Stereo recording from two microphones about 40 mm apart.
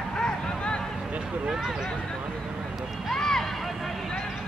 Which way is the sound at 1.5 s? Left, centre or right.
Centre.